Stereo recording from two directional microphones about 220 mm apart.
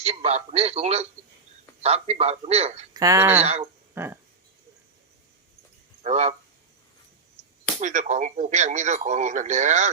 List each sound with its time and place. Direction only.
0.0 s a man's voice: 30° right (ahead or behind)
2.9 s speech: 15° right (ahead or behind)
3.4 s a man's voice: 25° right (ahead or behind)
3.9 s speech: 10° right (ahead or behind)
6.0 s speech: 30° right (ahead or behind)
7.8 s speech: 35° right (ahead or behind)